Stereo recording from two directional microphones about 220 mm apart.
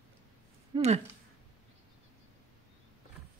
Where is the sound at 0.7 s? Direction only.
30° right (ahead or behind).